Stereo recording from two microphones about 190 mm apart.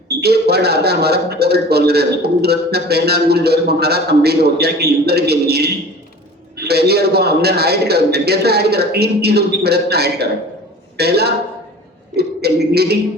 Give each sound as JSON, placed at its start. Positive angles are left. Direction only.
{"t": 0.2, "sound": "a man's voice", "side_deg": -55}